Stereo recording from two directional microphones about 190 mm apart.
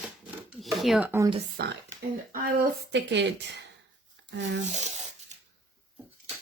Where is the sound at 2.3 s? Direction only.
60° right (ahead or behind).